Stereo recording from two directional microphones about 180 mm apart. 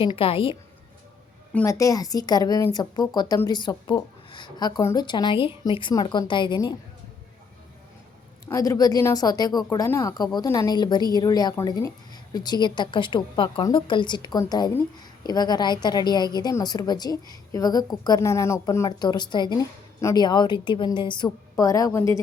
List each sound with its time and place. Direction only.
0.0 s a woman's voice: 30° left (ahead or behind)
1.5 s a woman's voice: 15° left (ahead or behind)
8.4 s a woman's voice: 15° left (ahead or behind)